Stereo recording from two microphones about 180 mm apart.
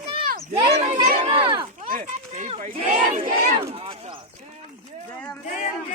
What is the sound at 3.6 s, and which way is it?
Speech, 30° right (ahead or behind).